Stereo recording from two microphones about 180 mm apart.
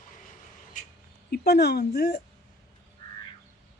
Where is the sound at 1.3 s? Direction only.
65° left (ahead or behind).